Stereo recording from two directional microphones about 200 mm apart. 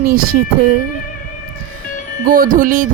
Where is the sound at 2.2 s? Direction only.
45° right (ahead or behind).